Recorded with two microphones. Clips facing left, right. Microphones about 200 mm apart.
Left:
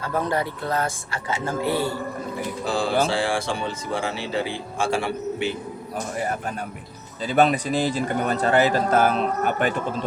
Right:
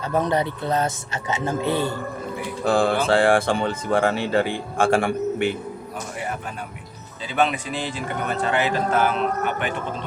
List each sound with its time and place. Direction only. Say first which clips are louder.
0.0 s speech: right 3 dB; 20° right (ahead or behind)
2.6 s speech: right 4 dB; 55° right (ahead or behind)
7.3 s a man's voice: left 4 dB; 40° left (ahead or behind)